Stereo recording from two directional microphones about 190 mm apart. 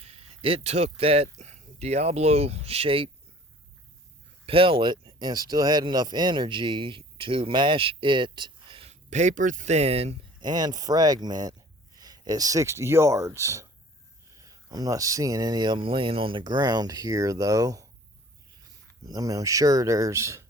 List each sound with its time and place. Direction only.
0.0 s speech: 30° right (ahead or behind)
4.4 s speech: 30° right (ahead or behind)
10.5 s speech: 20° right (ahead or behind)
19.0 s speech: 20° right (ahead or behind)